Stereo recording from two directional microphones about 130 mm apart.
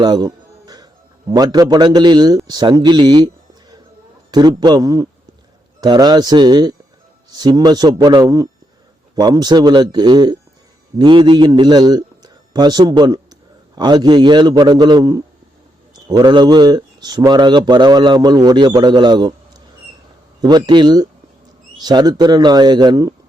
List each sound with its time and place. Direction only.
0.0 s music: 30° right (ahead or behind)
1.3 s speech: 30° right (ahead or behind)
4.3 s a man's voice: 30° right (ahead or behind)